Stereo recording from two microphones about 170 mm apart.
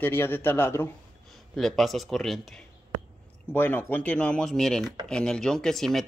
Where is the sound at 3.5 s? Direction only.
10° left (ahead or behind).